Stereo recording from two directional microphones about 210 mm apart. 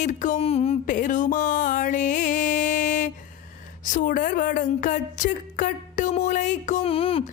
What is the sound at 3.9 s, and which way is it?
Speech, 40° left (ahead or behind).